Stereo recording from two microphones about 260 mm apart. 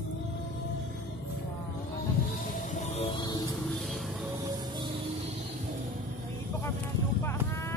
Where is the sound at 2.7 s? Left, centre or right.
Left.